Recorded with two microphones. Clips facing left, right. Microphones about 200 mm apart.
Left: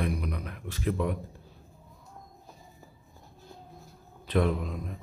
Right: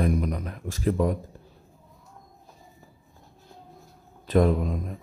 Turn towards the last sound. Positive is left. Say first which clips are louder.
# right 6 dB
turn(degrees=-45)  # may be behind; listen again after turning